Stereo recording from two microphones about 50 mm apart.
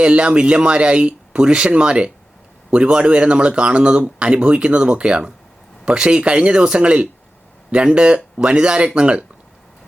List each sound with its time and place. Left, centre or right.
0.0 s a man's voice: right